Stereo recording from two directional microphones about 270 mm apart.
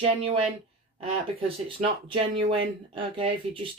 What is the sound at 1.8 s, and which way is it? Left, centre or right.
Speech, right.